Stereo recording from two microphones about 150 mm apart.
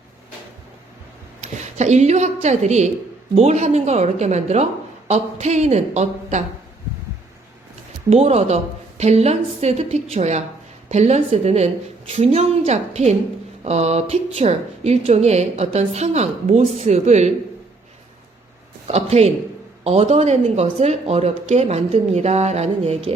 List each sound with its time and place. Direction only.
1.4 s a woman's voice: 50° right (ahead or behind)
8.1 s a woman's voice: 45° right (ahead or behind)
18.9 s a woman's voice: 45° right (ahead or behind)